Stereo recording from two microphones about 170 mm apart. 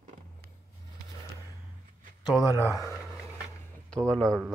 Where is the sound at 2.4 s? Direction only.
20° left (ahead or behind).